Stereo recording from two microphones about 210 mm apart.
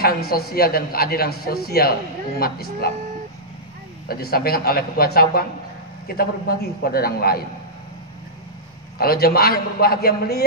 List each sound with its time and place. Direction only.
0.0 s a man's voice: 45° left (ahead or behind)
4.1 s a man's voice: 45° left (ahead or behind)
8.9 s a man's voice: 45° left (ahead or behind)